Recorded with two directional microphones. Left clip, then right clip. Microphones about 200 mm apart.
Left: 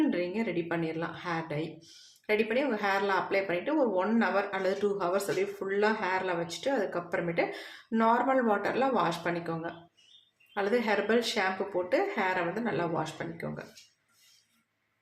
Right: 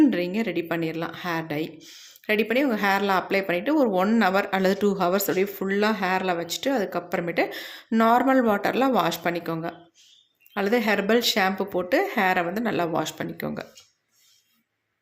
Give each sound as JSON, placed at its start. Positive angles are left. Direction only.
{"t": 0.1, "sound": "speech", "side_deg": -55}